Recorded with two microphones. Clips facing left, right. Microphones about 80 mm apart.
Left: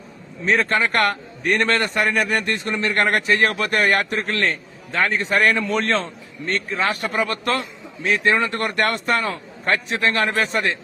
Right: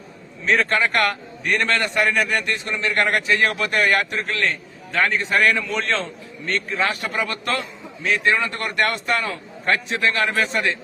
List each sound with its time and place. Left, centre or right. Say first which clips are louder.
0.4 s a man's voice: even; left